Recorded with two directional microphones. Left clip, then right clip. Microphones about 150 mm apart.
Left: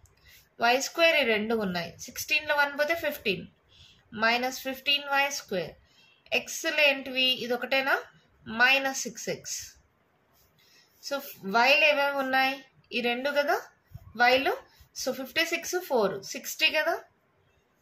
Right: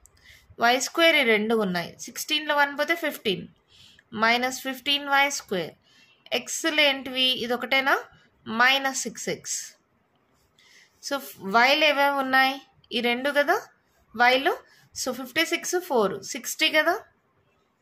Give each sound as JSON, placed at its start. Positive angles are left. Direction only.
{"t": 0.2, "sound": "speech", "side_deg": -50}
{"t": 11.1, "sound": "speech", "side_deg": -50}